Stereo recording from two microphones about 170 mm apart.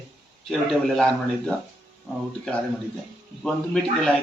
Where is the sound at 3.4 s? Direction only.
5° left (ahead or behind).